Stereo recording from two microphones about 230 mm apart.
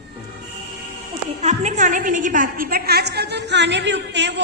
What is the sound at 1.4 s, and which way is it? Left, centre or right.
A woman's voice, right.